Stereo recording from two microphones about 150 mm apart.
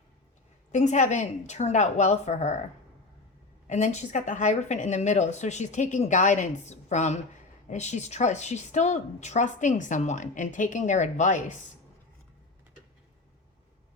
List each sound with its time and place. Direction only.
0.7 s speech: 50° left (ahead or behind)
3.7 s speech: 55° left (ahead or behind)